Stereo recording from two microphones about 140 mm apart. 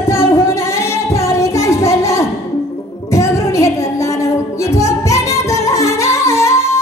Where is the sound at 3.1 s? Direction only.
20° left (ahead or behind).